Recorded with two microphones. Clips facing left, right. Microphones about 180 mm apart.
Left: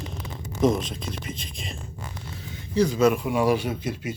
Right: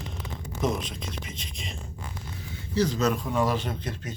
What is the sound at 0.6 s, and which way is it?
Speech, centre (ahead or behind).